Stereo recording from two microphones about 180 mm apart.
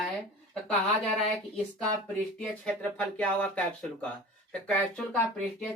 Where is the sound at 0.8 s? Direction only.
Centre (ahead or behind).